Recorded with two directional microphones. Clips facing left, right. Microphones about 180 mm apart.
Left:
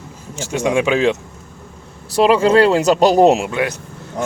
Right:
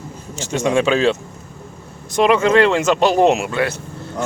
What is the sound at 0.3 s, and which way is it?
Speech, 15° left (ahead or behind).